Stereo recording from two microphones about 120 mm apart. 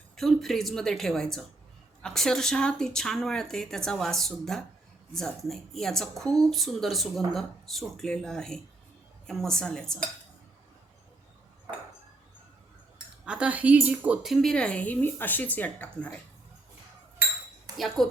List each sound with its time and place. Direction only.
0.2 s speech: centre (ahead or behind)
13.2 s a woman's voice: 10° right (ahead or behind); by 16.1 s 10° left (ahead or behind)
17.7 s speech: centre (ahead or behind)